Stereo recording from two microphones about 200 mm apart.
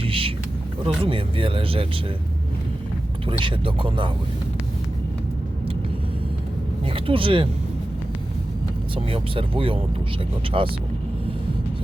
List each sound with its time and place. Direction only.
0.0 s vehicle: 25° right (ahead or behind)
1.0 s speech: 25° right (ahead or behind)
3.2 s speech: 25° right (ahead or behind)
6.9 s speech: 25° right (ahead or behind)
9.0 s speech: 25° right (ahead or behind)